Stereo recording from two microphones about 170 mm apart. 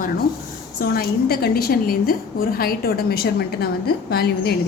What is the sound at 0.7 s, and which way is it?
A woman's voice, 65° left (ahead or behind).